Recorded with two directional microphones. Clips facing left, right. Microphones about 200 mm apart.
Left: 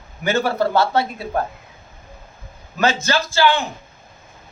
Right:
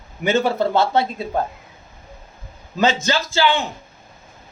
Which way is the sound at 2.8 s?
20° right (ahead or behind).